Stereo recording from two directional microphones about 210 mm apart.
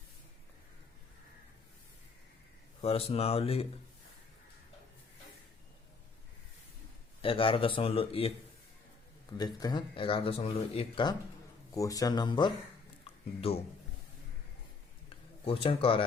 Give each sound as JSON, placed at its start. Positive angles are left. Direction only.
{"t": 2.8, "sound": "speech", "side_deg": 30}
{"t": 7.2, "sound": "speech", "side_deg": 25}
{"t": 9.4, "sound": "speech", "side_deg": 20}
{"t": 15.4, "sound": "speech", "side_deg": 25}